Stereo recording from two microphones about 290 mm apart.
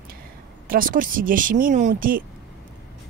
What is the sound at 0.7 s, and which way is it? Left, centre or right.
A woman's voice, right.